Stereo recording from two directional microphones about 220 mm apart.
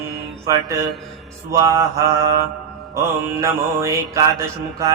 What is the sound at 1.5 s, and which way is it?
Mantra, 15° right (ahead or behind).